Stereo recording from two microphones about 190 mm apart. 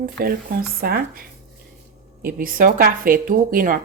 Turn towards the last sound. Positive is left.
turn(degrees=-45)  # may be behind; listen again after turning